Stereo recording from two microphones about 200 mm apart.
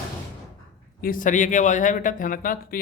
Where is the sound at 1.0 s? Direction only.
45° left (ahead or behind).